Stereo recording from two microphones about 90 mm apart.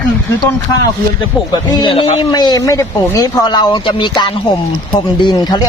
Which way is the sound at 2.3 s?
50° left (ahead or behind).